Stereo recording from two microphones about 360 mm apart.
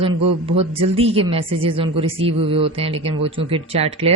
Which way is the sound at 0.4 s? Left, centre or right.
Centre.